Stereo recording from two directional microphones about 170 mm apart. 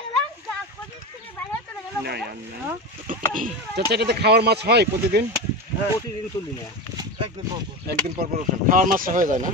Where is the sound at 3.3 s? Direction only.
60° right (ahead or behind).